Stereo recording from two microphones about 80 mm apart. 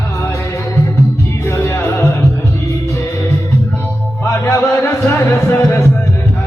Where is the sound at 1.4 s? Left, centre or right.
Left.